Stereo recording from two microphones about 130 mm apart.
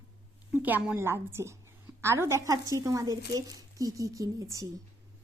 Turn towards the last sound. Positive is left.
turn(degrees=-25)  # may be behind; listen again after turning